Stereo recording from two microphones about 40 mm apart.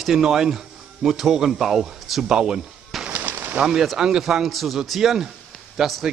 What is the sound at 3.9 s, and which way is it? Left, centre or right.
A man's voice, centre.